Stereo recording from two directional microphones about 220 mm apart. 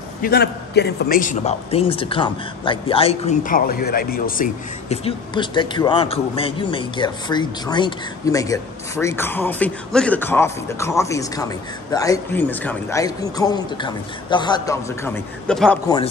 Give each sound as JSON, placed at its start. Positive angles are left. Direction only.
{"t": 0.2, "sound": "a man's voice", "side_deg": 45}
{"t": 5.0, "sound": "speech", "side_deg": 20}